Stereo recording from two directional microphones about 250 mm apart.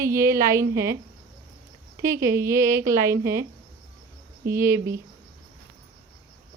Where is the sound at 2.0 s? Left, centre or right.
Centre.